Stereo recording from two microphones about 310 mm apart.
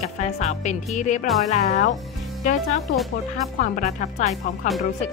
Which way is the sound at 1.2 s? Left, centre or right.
Centre.